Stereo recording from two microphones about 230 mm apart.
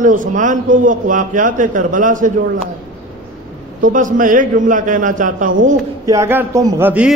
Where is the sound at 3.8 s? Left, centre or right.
Right.